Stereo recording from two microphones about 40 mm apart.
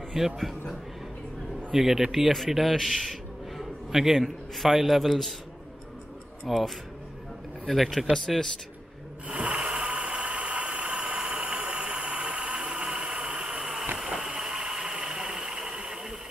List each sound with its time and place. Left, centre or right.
0.2 s a man's voice: centre
1.7 s a man's voice: centre
6.4 s speech: centre
9.3 s a sound: right